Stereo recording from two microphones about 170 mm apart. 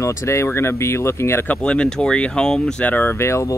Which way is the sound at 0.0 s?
15° left (ahead or behind).